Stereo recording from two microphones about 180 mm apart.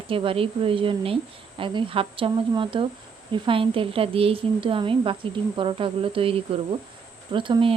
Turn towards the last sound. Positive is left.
turn(degrees=-30)  # may be behind; listen again after turning